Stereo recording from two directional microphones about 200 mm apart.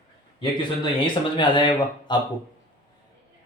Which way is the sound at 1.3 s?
25° left (ahead or behind).